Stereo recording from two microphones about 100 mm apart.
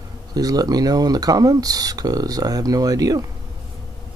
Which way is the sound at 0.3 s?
40° right (ahead or behind).